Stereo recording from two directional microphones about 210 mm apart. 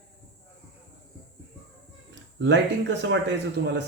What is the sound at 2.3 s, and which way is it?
Speech, 60° right (ahead or behind).